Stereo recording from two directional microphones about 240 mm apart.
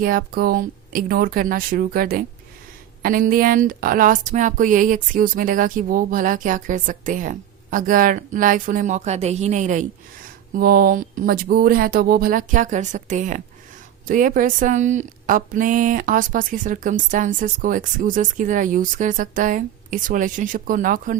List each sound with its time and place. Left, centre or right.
0.0 s a woman's voice: right